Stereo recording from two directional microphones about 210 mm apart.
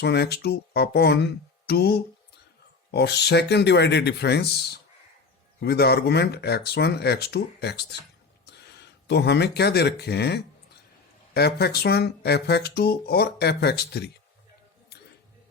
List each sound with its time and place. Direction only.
0.0 s speech: 50° left (ahead or behind)